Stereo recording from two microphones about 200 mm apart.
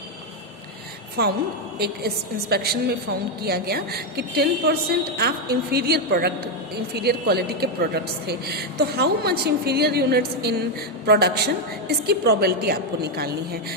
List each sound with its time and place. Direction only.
1.2 s a woman's voice: 50° right (ahead or behind)